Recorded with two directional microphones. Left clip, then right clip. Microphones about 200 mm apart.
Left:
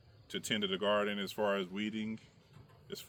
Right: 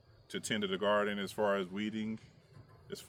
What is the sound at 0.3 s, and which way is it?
Speech, 15° right (ahead or behind).